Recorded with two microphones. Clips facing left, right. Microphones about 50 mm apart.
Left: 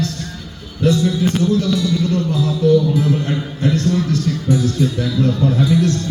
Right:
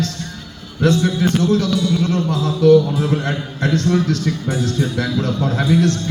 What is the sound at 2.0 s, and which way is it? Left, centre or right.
A man's voice, right.